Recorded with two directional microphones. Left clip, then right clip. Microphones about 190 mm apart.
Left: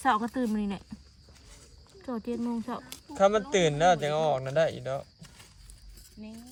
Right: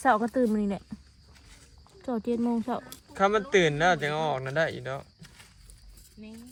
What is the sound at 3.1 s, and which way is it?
Speech, 20° left (ahead or behind).